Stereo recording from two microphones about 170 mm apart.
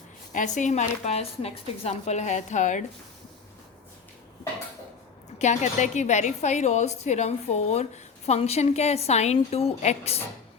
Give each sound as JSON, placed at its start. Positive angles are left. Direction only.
{"t": 0.3, "sound": "a woman's voice", "side_deg": 45}
{"t": 5.4, "sound": "a woman's voice", "side_deg": 45}